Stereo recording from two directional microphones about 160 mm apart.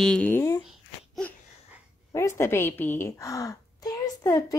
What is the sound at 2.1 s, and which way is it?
A woman's voice, 20° left (ahead or behind).